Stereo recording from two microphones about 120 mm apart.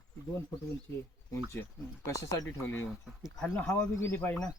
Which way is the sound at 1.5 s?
25° left (ahead or behind).